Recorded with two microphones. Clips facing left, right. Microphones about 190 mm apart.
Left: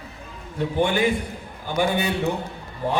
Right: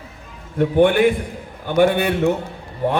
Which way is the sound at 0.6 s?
60° right (ahead or behind).